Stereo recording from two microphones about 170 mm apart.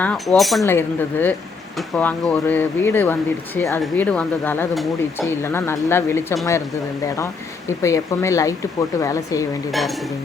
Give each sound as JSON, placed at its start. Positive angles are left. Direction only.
{"t": 0.0, "sound": "speech", "side_deg": 5}
{"t": 0.6, "sound": "speech", "side_deg": 15}
{"t": 7.7, "sound": "speech", "side_deg": 15}
{"t": 9.7, "sound": "speech", "side_deg": 0}